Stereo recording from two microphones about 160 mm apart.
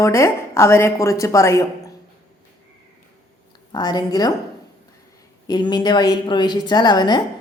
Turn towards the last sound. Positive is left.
turn(degrees=25)  # may be behind; listen again after turning